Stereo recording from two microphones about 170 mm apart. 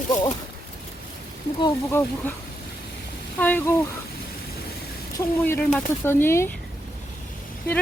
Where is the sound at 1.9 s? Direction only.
10° left (ahead or behind).